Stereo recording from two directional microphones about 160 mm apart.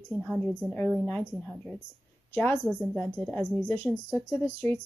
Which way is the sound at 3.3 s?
10° left (ahead or behind).